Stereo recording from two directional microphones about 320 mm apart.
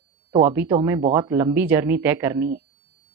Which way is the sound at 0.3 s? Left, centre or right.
Centre.